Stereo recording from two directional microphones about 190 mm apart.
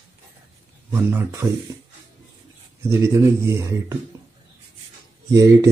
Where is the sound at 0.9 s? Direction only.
15° right (ahead or behind).